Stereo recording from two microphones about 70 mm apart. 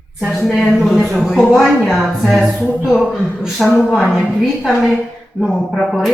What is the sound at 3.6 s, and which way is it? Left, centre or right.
Speech, centre.